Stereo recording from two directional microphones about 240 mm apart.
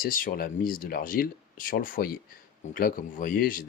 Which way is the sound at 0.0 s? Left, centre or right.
Left.